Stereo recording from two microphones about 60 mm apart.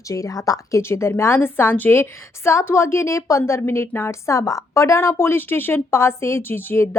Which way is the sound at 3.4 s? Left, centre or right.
Left.